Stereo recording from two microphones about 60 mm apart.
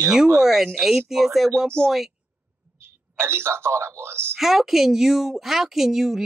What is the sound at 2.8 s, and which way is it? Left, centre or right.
A man's voice, right.